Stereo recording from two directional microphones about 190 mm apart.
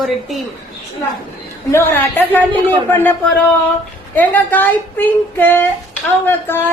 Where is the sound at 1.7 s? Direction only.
10° left (ahead or behind).